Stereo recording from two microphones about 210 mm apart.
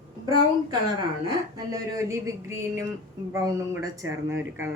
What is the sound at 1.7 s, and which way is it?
Speech, 15° right (ahead or behind).